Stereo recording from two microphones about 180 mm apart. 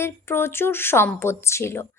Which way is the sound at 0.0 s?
15° left (ahead or behind).